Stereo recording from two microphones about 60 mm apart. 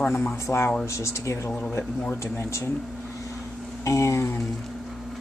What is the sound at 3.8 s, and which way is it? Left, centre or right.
Speech, left.